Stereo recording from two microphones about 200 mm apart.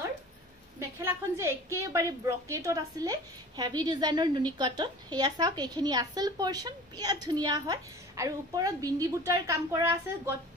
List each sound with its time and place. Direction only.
0.7 s a woman's voice: 15° right (ahead or behind)